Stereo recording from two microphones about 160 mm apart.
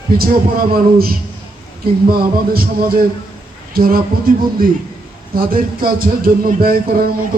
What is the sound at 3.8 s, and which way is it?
A man's voice, 65° right (ahead or behind).